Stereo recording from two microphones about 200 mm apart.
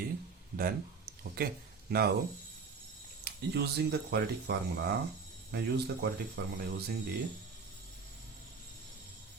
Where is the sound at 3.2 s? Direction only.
55° right (ahead or behind).